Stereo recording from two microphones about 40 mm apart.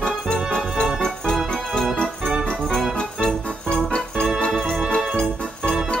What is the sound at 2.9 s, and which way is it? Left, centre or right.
Music, left.